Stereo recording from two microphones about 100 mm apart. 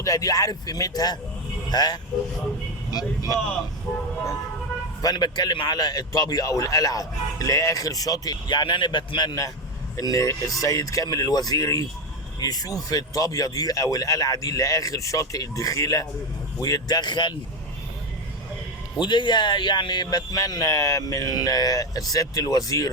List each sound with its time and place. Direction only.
0.0 s a man's voice: 35° left (ahead or behind)
5.0 s a man's voice: 45° left (ahead or behind)
18.9 s a man's voice: 50° left (ahead or behind); by 22.9 s 35° left (ahead or behind)